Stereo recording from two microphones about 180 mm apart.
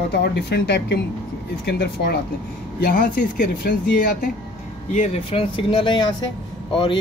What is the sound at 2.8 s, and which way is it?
Speech, 55° left (ahead or behind).